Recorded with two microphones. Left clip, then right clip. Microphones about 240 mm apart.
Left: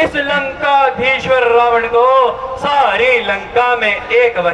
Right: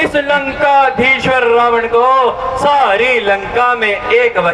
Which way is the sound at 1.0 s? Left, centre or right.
Centre.